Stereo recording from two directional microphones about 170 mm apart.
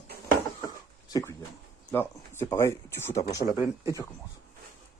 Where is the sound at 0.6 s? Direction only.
20° left (ahead or behind).